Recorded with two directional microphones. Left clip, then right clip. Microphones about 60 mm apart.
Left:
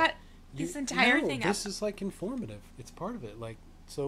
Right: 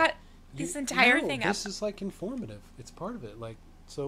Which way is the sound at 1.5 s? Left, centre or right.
Centre.